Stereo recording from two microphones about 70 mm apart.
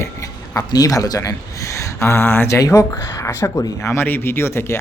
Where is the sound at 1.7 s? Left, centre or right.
Left.